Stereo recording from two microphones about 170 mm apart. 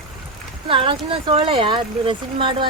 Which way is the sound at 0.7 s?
30° right (ahead or behind).